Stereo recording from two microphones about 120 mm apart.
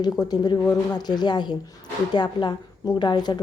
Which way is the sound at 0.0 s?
35° left (ahead or behind).